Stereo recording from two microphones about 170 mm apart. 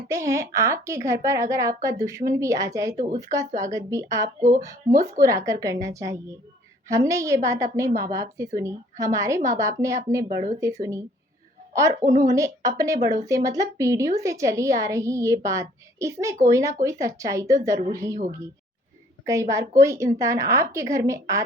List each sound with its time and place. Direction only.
0.1 s a woman's voice: 15° right (ahead or behind)
4.4 s speech: 50° right (ahead or behind)
5.2 s a woman's voice: 20° right (ahead or behind)
19.2 s speech: 20° right (ahead or behind)